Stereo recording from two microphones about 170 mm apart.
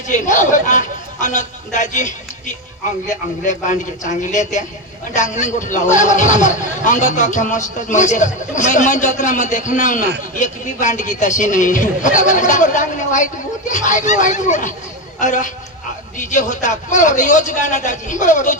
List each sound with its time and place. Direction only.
0.1 s speech: 50° left (ahead or behind)
3.4 s speech: 45° left (ahead or behind)